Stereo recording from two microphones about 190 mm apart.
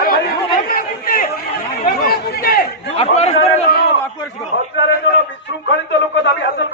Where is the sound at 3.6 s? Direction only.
50° left (ahead or behind).